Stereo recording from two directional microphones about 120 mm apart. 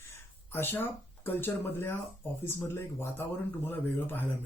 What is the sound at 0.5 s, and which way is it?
Speech, 20° left (ahead or behind).